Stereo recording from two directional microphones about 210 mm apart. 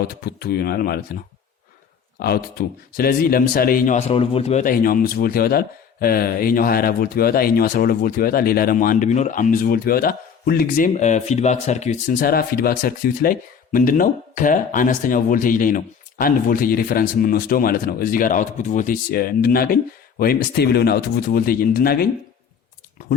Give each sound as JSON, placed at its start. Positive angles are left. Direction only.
{"t": 0.1, "sound": "speech", "side_deg": 45}
{"t": 2.1, "sound": "speech", "side_deg": 45}
{"t": 4.1, "sound": "speech", "side_deg": 25}
{"t": 4.6, "sound": "speech", "side_deg": 45}